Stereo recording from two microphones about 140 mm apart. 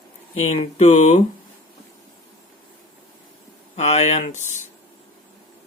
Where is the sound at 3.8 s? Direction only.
50° left (ahead or behind).